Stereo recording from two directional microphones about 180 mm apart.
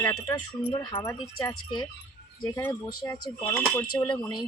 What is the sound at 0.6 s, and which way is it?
Speech, 35° left (ahead or behind).